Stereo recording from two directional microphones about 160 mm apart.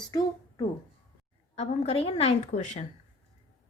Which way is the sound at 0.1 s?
25° left (ahead or behind).